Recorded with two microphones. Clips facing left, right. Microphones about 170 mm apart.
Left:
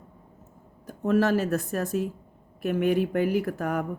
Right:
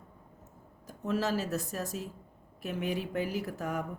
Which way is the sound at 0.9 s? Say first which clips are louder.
Left 8 dB; 55° left (ahead or behind).